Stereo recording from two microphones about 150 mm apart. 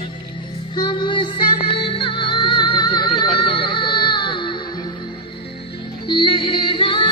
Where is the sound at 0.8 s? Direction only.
30° left (ahead or behind).